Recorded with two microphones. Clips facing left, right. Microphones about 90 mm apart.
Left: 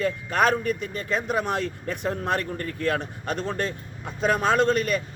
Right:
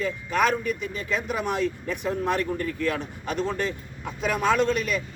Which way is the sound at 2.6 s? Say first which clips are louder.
Left 1 dB; 50° left (ahead or behind).